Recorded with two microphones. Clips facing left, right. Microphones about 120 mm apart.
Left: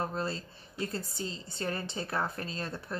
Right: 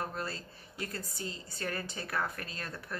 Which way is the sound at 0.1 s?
25° left (ahead or behind).